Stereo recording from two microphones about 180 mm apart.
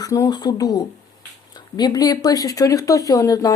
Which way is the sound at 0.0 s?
20° left (ahead or behind).